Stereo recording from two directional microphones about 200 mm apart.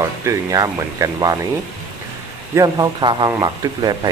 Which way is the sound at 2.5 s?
20° right (ahead or behind).